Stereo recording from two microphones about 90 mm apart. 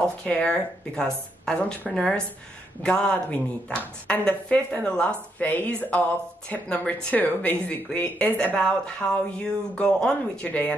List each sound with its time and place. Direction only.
0.0 s a woman's voice: 10° left (ahead or behind)